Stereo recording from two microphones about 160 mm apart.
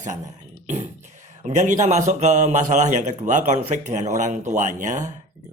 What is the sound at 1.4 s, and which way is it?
A man's voice, 50° right (ahead or behind).